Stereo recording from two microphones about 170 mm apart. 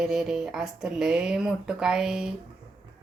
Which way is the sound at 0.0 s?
5° right (ahead or behind).